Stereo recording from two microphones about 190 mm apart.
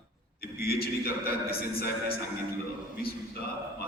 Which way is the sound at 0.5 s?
55° left (ahead or behind).